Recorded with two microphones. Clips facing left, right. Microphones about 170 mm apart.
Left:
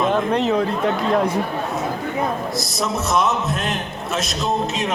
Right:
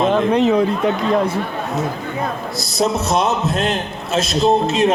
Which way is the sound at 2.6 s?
30° right (ahead or behind).